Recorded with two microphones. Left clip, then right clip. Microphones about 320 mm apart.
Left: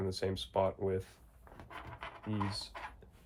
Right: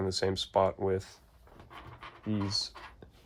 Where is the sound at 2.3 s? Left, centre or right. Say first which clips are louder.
Right 3 dB; right.